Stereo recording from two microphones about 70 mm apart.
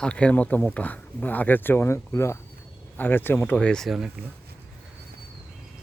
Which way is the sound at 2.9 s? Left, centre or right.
Left.